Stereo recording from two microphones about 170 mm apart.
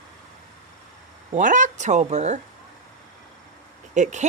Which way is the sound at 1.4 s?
50° right (ahead or behind).